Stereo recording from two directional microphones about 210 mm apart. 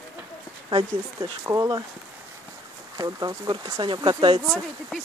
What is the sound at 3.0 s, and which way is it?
Speech, 20° right (ahead or behind).